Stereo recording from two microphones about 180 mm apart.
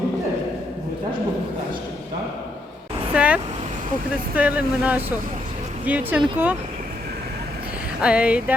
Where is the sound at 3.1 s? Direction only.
5° right (ahead or behind).